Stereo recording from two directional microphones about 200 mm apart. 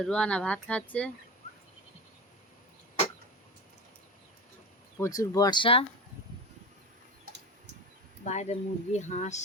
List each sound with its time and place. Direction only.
0.0 s speech: 5° left (ahead or behind)
4.9 s speech: 15° left (ahead or behind)
8.2 s speech: 35° left (ahead or behind)